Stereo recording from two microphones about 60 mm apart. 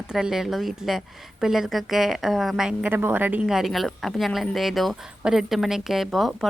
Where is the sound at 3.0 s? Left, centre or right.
Right.